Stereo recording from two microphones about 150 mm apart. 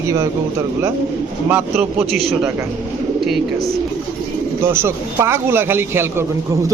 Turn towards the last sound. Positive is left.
turn(degrees=-15)  # may be behind; listen again after turning